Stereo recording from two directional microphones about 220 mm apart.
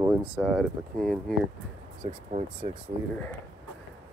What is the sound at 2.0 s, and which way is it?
Speech, 25° right (ahead or behind).